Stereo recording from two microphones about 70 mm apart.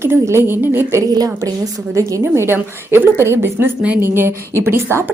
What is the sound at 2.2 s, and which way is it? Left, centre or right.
A woman's voice, right.